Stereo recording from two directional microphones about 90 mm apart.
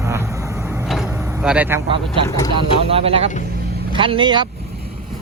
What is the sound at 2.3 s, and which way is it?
Speech, 40° left (ahead or behind).